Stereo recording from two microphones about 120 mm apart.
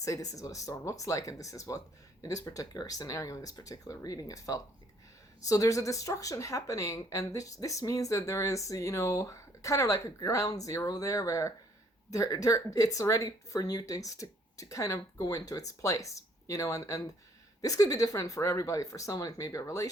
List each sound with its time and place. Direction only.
0.0 s speech: 30° left (ahead or behind)